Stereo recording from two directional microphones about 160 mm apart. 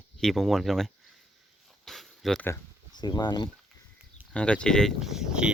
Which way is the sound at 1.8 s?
Centre (ahead or behind).